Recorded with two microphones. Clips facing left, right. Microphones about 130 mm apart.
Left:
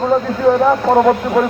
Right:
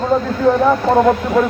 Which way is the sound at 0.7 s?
10° left (ahead or behind).